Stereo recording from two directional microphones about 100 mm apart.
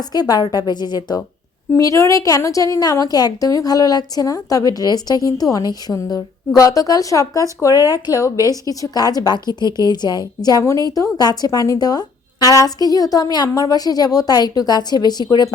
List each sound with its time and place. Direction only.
0.0 s a woman's voice: 40° left (ahead or behind)
1.7 s a woman's voice: 30° left (ahead or behind)
10.6 s a woman's voice: 30° left (ahead or behind)